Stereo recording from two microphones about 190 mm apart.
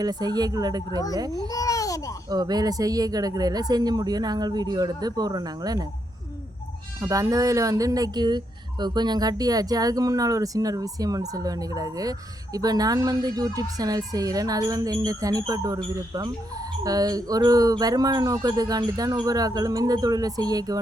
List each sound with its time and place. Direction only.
0.0 s speech: 20° right (ahead or behind)
1.4 s babbling: 20° left (ahead or behind)
2.3 s speech: 20° right (ahead or behind)
7.0 s speech: 15° right (ahead or behind)
16.8 s speech: 20° right (ahead or behind)